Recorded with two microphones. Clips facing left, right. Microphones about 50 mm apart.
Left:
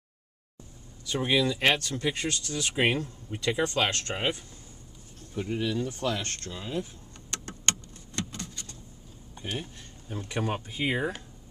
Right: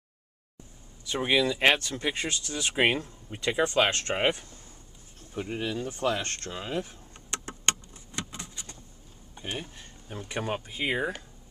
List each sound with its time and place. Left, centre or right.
1.0 s speech: centre
5.3 s speech: centre; by 6.9 s right
7.2 s a sound: right
9.8 s speech: centre